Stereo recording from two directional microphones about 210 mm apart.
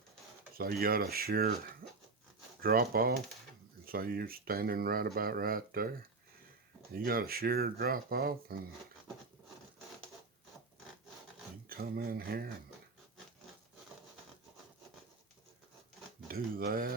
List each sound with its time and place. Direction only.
0.5 s speech: 45° right (ahead or behind)
1.8 s a sound: 45° right (ahead or behind)
2.6 s speech: 45° right (ahead or behind)
6.9 s speech: 45° right (ahead or behind)
11.7 s speech: 45° right (ahead or behind)
16.3 s speech: 45° right (ahead or behind)